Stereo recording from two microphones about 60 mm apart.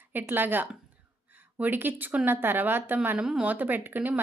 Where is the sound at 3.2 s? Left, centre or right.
Centre.